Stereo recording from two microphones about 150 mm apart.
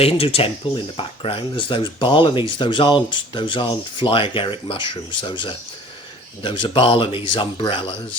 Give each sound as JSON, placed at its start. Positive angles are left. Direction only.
{"t": 0.0, "sound": "speech", "side_deg": 40}